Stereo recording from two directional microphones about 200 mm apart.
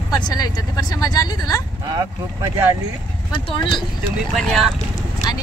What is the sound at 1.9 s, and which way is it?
Speech, 15° right (ahead or behind).